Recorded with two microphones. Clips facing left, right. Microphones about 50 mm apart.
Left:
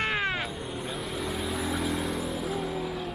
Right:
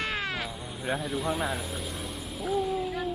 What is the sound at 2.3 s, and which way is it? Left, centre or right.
Vehicle, centre.